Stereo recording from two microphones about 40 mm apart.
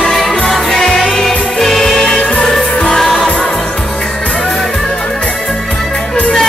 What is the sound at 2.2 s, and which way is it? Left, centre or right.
Music, left.